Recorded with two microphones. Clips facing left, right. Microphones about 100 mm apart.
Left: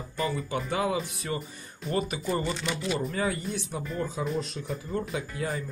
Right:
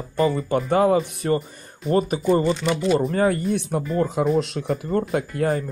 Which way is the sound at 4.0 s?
65° right (ahead or behind).